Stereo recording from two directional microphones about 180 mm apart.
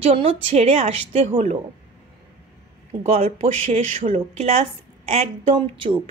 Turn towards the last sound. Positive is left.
turn(degrees=-30)  # may be behind; listen again after turning